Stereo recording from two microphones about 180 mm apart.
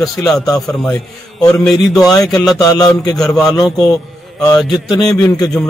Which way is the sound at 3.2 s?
5° left (ahead or behind).